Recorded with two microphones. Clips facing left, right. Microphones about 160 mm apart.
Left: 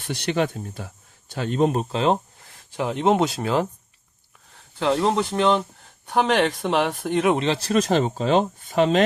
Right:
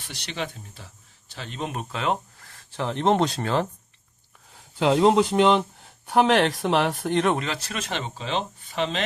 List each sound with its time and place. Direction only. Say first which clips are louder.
0.1 s speech: left 10 dB; 50° left (ahead or behind)
1.7 s speech: left 6 dB; 30° left (ahead or behind)
2.6 s speech: left 2 dB; 10° left (ahead or behind)
4.5 s speech: right 1 dB; 15° right (ahead or behind); by 7.3 s 5° left (ahead or behind)
7.3 s speech: left 9 dB; 30° left (ahead or behind); by 9.0 s 45° left (ahead or behind)